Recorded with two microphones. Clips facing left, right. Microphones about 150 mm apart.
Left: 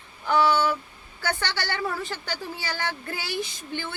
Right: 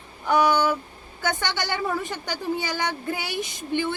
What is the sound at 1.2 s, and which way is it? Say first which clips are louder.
A woman's voice: right 2 dB; 15° right (ahead or behind).